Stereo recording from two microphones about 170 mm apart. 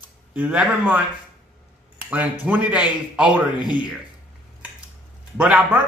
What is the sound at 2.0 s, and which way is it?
Speech, 10° right (ahead or behind).